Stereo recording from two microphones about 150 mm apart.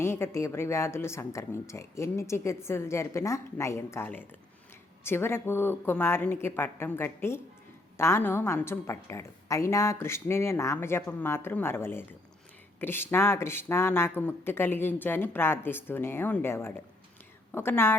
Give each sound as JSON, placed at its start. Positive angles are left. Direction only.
{"t": 0.0, "sound": "a woman's voice", "side_deg": 15}